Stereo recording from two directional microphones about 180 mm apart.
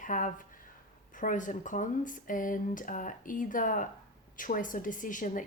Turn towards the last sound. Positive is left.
turn(degrees=45)  # may be behind; listen again after turning